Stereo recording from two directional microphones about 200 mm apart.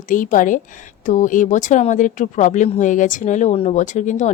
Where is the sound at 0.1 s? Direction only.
40° left (ahead or behind).